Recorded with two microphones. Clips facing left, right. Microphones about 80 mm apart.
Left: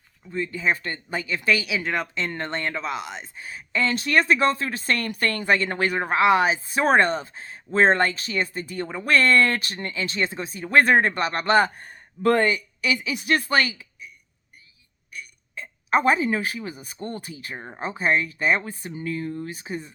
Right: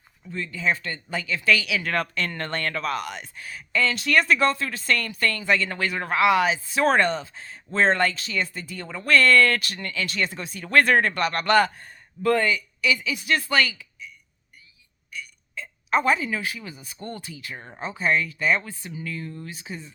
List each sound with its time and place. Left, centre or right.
0.3 s speech: left
0.5 s speech: left
1.9 s speech: centre
10.6 s speech: left
15.9 s speech: left
19.5 s speech: left